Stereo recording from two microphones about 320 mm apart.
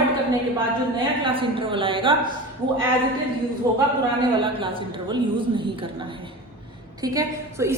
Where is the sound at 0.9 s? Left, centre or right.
Centre.